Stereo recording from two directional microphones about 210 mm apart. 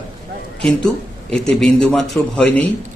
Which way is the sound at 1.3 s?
5° left (ahead or behind).